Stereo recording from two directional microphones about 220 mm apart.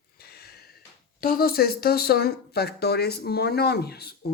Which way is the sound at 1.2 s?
40° left (ahead or behind).